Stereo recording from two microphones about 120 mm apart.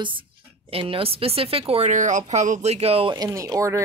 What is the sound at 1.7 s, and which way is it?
Speech, 75° right (ahead or behind).